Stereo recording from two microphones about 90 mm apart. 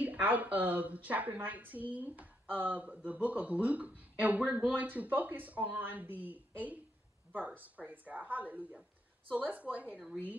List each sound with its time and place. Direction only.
0.0 s speech: 20° right (ahead or behind)